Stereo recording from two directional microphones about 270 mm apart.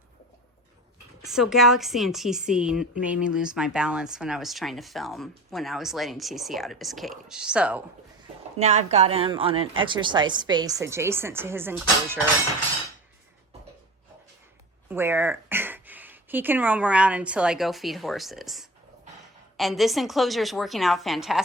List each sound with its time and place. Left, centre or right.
1.2 s a woman's voice: centre
8.5 s speech: right; by 12.2 s centre
14.8 s a woman's voice: centre